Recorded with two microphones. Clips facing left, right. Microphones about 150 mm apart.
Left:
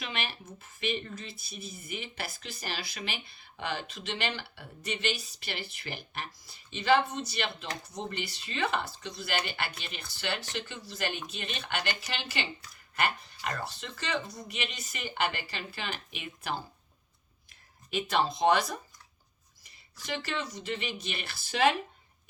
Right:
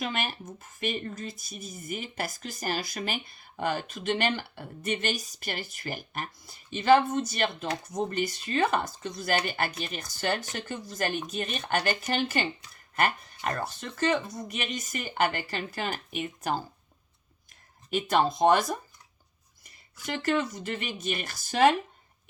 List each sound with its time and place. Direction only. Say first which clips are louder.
0.0 s speech: right 5 dB; 45° right (ahead or behind)
17.9 s speech: right 4 dB; 50° right (ahead or behind)
20.1 s speech: right 7 dB; 50° right (ahead or behind)